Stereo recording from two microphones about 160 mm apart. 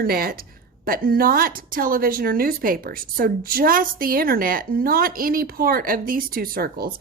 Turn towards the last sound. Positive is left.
turn(degrees=-70)  # may be behind; listen again after turning